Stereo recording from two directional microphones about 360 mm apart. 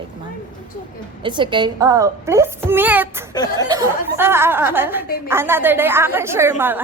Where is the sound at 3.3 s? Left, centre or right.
Centre.